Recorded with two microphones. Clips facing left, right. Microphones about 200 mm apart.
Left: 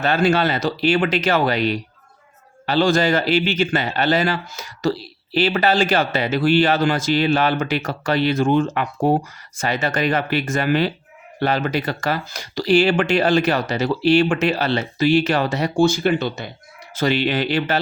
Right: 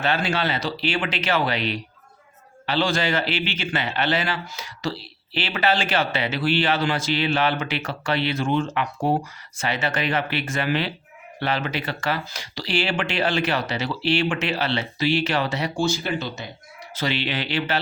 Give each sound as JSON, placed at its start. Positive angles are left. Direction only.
{"t": 0.0, "sound": "speech", "side_deg": 45}